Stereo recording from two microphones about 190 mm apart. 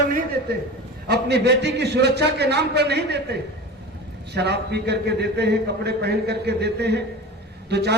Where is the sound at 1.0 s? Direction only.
60° right (ahead or behind).